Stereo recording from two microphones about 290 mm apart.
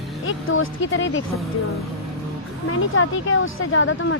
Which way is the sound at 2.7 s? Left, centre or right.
Left.